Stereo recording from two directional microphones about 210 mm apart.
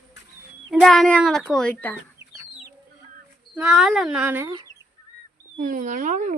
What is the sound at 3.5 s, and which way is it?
A child's voice, centre (ahead or behind).